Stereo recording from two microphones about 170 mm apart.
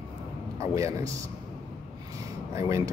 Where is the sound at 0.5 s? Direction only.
20° right (ahead or behind).